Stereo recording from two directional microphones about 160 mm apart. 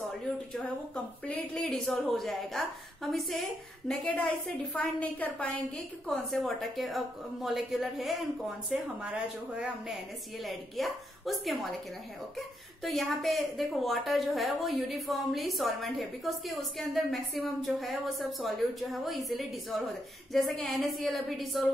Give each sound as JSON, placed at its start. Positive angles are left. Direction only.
{"t": 1.2, "sound": "a woman's voice", "side_deg": 5}